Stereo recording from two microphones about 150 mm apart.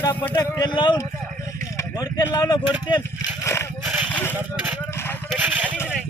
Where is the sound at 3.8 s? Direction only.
10° right (ahead or behind).